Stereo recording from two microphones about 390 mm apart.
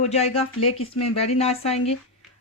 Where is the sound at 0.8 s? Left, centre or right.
Left.